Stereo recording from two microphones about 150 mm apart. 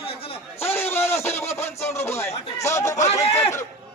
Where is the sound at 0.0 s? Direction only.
40° left (ahead or behind).